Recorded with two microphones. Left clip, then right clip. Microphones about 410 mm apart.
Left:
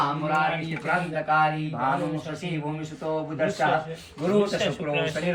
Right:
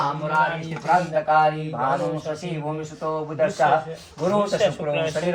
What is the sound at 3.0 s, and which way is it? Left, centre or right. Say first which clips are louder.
A man's voice: right 4 dB; right.